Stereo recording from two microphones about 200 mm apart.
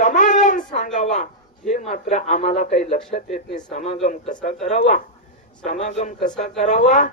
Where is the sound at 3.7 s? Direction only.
35° left (ahead or behind).